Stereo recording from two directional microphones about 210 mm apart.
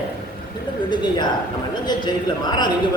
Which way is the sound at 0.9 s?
20° left (ahead or behind).